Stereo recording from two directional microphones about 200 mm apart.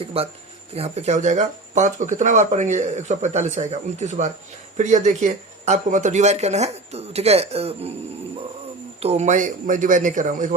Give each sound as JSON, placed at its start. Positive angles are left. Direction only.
{"t": 0.0, "sound": "speech", "side_deg": -30}
{"t": 9.0, "sound": "speech", "side_deg": -30}